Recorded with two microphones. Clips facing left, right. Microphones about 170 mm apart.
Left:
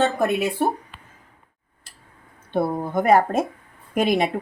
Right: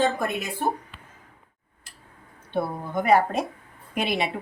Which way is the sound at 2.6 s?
45° left (ahead or behind).